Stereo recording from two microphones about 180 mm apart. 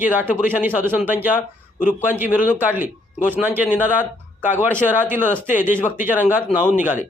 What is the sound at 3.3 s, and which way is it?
Speech, 10° right (ahead or behind).